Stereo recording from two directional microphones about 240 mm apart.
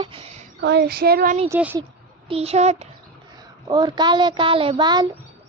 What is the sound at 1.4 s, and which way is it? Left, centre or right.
Speech, centre.